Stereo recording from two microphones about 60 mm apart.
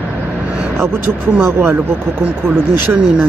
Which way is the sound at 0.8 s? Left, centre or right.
Right.